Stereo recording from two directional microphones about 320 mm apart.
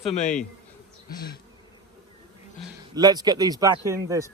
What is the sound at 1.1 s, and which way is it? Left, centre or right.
Speech, left.